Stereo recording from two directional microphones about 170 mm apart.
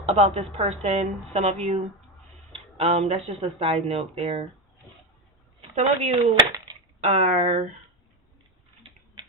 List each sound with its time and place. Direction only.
0.1 s speech: 35° right (ahead or behind)
5.7 s speech: 40° right (ahead or behind)